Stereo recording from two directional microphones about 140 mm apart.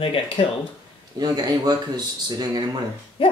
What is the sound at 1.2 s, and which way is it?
Speech, 30° right (ahead or behind).